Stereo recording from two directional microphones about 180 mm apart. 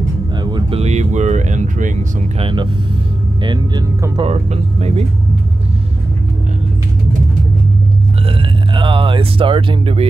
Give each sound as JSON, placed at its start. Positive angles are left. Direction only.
{"t": 0.4, "sound": "speech", "side_deg": -25}
{"t": 2.4, "sound": "speech", "side_deg": -25}
{"t": 4.3, "sound": "speech", "side_deg": -35}
{"t": 8.3, "sound": "speech", "side_deg": -30}